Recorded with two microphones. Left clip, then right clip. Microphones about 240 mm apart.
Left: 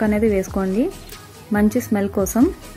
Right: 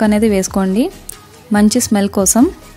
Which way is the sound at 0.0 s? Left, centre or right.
Right.